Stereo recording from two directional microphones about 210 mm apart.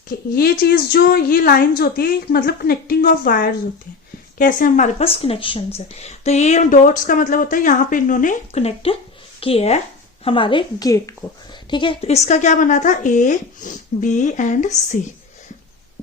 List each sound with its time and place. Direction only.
0.1 s a woman's voice: 45° left (ahead or behind)